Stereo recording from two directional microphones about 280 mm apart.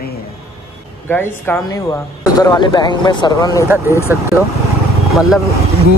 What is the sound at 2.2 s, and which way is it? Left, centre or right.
Speech, centre.